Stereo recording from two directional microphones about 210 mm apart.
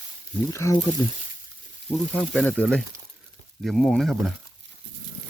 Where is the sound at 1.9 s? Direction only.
5° left (ahead or behind).